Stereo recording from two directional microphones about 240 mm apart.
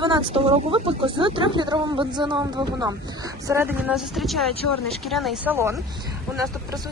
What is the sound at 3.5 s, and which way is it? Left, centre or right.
Speech, centre.